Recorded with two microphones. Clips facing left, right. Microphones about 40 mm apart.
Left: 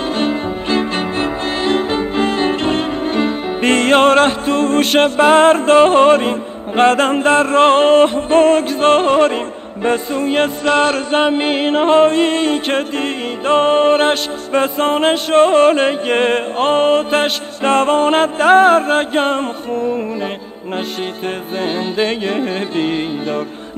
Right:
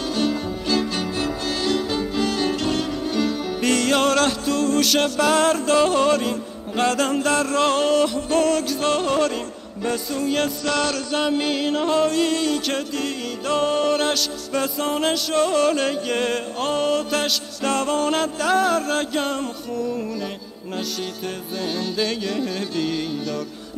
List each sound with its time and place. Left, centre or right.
0.1 s music: left
21.5 s music: left